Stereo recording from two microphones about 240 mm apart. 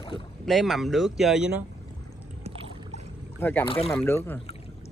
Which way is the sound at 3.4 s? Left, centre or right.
Centre.